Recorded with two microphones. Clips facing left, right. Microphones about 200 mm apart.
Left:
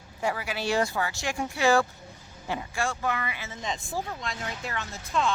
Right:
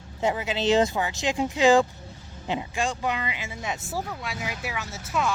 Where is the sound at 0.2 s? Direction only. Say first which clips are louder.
Right 4 dB; 20° right (ahead or behind).